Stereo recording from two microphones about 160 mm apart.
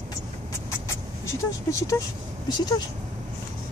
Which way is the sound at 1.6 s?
20° left (ahead or behind).